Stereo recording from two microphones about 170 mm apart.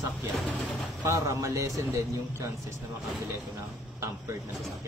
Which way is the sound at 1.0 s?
20° right (ahead or behind).